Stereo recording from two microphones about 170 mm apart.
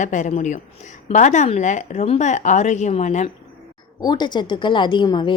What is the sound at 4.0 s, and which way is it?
A woman's voice, 25° left (ahead or behind).